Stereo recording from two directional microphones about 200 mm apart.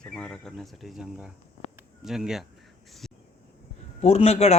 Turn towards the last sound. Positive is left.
turn(degrees=30)  # may be behind; listen again after turning